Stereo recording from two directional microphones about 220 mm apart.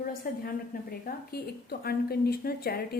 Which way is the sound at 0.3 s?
40° left (ahead or behind).